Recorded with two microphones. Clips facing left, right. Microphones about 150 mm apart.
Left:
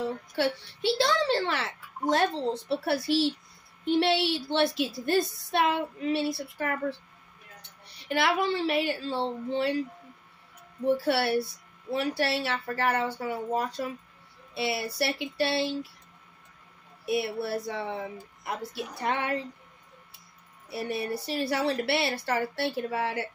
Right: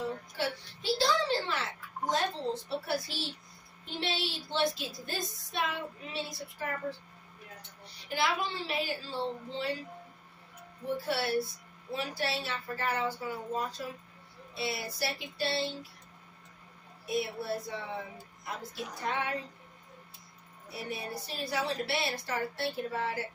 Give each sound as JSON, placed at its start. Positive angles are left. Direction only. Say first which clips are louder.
{"t": 0.4, "sound": "a woman's voice", "louder": "left 9 dB", "side_deg": 70}
{"t": 7.8, "sound": "a woman's voice", "louder": "left 5 dB", "side_deg": 65}
{"t": 11.1, "sound": "a woman's voice", "louder": "left 5 dB", "side_deg": 70}
{"t": 17.0, "sound": "a woman's voice", "louder": "left 5 dB", "side_deg": 70}
{"t": 20.7, "sound": "a woman's voice", "louder": "left 7 dB", "side_deg": 70}